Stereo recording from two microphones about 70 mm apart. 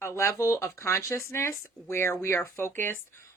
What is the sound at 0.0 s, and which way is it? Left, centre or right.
Speech, left.